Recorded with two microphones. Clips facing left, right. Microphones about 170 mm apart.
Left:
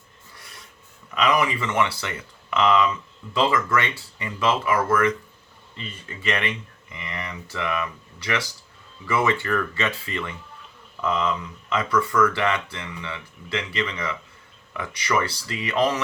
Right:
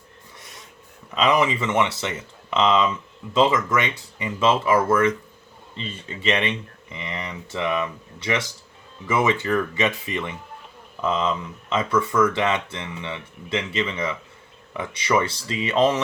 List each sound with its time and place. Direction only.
1.1 s speech: 25° right (ahead or behind)